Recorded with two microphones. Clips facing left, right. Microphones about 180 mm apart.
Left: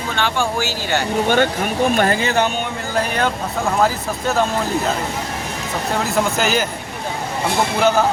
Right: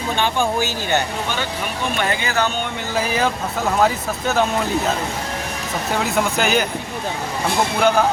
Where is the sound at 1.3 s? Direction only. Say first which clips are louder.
Left 8 dB; 50° left (ahead or behind).